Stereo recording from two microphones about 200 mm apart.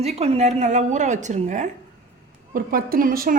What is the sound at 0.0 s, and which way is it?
A woman's voice, 30° right (ahead or behind).